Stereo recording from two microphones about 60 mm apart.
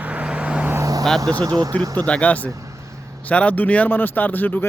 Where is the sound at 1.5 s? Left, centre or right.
Right.